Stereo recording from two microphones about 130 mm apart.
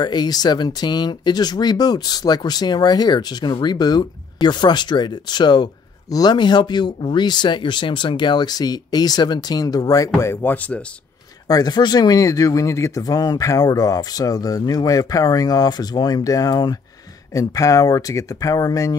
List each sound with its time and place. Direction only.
0.0 s speech: 35° left (ahead or behind); by 10.8 s 10° left (ahead or behind)
11.4 s speech: 30° left (ahead or behind)